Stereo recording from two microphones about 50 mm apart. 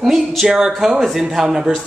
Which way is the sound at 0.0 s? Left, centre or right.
Centre.